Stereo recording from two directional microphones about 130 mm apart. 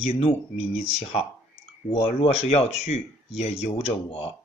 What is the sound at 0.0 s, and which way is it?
Speech, 50° left (ahead or behind).